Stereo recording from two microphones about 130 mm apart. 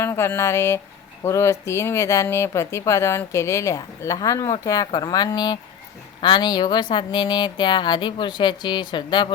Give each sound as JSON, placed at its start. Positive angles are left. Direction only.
{"t": 0.0, "sound": "speech", "side_deg": 20}